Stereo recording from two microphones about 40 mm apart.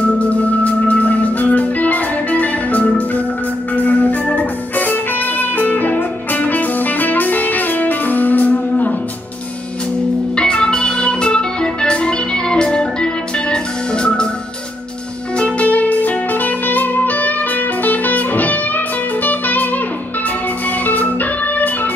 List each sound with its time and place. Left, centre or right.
0.2 s music: left
3.7 s organ: left
4.4 s music: left
10.3 s organ: left
15.3 s music: left
20.8 s organ: left